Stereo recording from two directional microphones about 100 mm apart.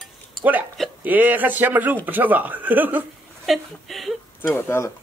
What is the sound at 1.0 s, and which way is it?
Speech, 15° right (ahead or behind).